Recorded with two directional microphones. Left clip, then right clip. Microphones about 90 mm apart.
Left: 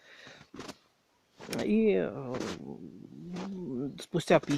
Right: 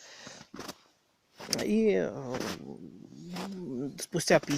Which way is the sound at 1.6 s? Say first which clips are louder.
Even; 10° left (ahead or behind).